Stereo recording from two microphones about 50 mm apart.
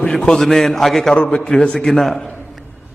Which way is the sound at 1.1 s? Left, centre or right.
Left.